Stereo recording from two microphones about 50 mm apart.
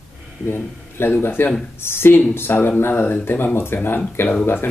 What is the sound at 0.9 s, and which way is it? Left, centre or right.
Speech, left.